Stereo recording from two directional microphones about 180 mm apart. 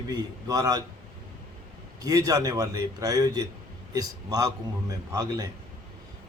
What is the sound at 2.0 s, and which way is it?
A man's voice, 20° right (ahead or behind).